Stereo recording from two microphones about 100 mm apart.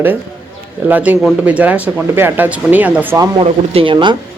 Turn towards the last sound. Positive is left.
turn(degrees=-55)  # may be behind; listen again after turning